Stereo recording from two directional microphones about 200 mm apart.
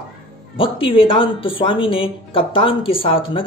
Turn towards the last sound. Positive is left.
turn(degrees=25)  # may be behind; listen again after turning